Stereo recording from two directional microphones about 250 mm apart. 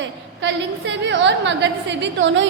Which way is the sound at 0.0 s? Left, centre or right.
Right.